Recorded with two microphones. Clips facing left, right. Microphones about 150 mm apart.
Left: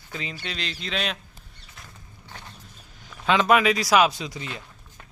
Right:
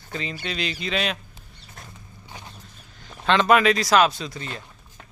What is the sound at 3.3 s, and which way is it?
Speech, 5° left (ahead or behind).